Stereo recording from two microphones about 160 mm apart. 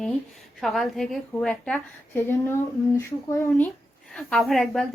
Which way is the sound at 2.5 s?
15° left (ahead or behind).